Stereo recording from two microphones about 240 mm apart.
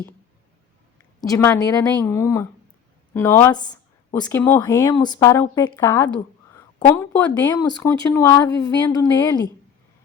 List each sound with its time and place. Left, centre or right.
1.2 s speech: centre